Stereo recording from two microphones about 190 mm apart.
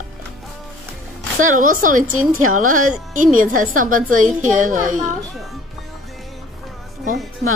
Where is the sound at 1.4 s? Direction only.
45° right (ahead or behind).